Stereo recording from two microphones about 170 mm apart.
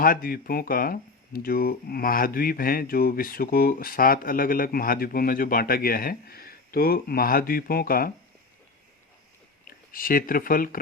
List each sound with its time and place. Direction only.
0.0 s speech: 60° left (ahead or behind)
9.6 s speech: 55° left (ahead or behind)